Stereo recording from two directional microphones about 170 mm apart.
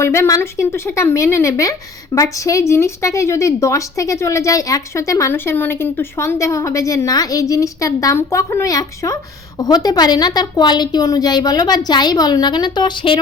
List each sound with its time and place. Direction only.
0.0 s a woman's voice: 15° left (ahead or behind)